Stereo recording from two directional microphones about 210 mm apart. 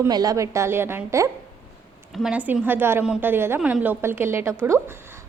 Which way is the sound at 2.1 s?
Centre (ahead or behind).